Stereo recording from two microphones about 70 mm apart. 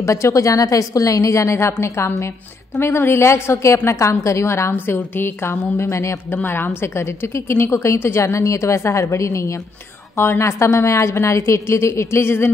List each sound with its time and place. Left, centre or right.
0.0 s a woman's voice: left
6.3 s a woman's voice: left